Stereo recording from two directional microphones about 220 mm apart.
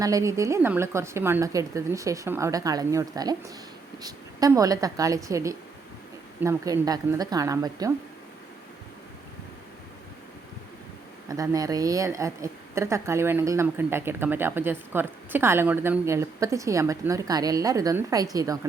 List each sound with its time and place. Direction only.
0.0 s a woman's voice: 15° right (ahead or behind)
11.3 s a woman's voice: 15° right (ahead or behind)